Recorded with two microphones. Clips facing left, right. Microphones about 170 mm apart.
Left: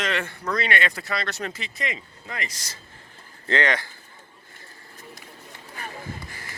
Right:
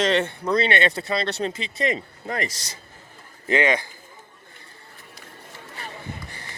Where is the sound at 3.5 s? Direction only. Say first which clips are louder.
Right 3 dB; 15° right (ahead or behind).